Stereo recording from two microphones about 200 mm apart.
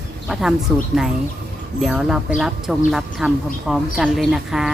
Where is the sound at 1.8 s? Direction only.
Centre (ahead or behind).